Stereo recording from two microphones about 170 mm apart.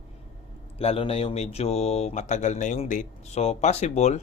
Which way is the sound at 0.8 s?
35° left (ahead or behind).